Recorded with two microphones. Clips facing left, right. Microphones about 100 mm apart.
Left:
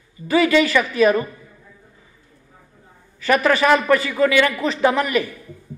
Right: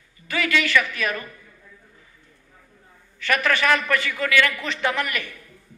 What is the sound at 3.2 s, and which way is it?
A man's voice, 35° left (ahead or behind).